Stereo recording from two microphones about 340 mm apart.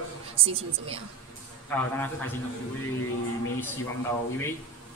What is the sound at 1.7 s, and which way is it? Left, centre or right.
Speech, centre.